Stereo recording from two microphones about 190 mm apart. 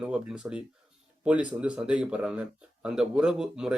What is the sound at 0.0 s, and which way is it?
Speech, 5° right (ahead or behind).